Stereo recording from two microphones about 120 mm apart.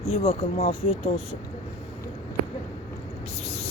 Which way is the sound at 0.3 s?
65° left (ahead or behind).